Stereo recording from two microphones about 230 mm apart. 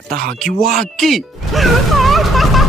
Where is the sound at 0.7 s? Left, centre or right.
Centre.